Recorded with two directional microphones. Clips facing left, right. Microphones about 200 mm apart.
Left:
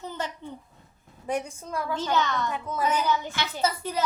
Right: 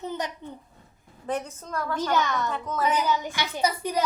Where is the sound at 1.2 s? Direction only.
10° left (ahead or behind).